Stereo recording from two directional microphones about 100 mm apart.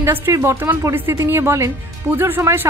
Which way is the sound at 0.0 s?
25° right (ahead or behind).